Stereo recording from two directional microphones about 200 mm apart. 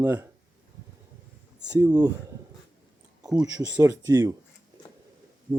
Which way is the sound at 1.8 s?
20° right (ahead or behind).